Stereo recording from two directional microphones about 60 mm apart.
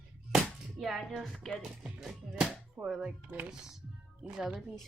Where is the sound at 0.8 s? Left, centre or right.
Centre.